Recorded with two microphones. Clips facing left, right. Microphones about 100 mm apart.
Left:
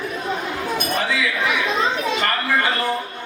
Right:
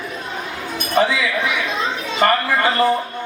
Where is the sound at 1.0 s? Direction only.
30° right (ahead or behind).